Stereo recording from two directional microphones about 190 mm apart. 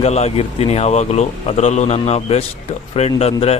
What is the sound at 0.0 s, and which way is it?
Speech, 35° left (ahead or behind).